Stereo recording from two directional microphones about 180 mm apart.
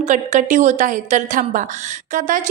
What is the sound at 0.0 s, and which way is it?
A woman's voice, 45° right (ahead or behind).